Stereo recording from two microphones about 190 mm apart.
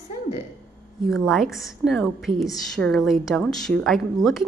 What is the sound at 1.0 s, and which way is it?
A woman's voice, centre (ahead or behind).